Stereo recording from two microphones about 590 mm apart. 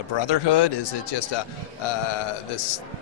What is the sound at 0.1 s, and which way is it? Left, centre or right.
Speech, left.